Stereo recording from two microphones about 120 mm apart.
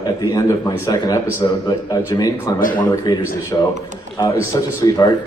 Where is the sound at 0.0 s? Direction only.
35° left (ahead or behind).